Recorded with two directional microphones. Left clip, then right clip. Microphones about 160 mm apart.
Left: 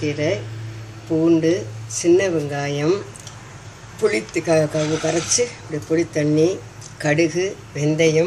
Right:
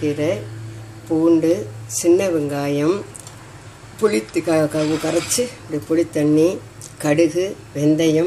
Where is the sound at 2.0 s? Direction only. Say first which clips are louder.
Right 1 dB; 50° right (ahead or behind).